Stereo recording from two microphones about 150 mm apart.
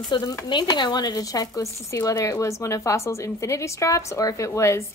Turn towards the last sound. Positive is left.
turn(degrees=20)  # may be behind; listen again after turning